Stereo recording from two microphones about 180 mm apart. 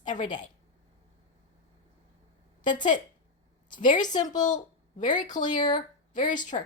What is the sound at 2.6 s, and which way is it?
A woman's voice, 45° left (ahead or behind).